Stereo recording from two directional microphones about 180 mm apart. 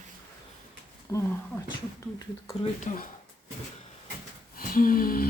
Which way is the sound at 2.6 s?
45° left (ahead or behind).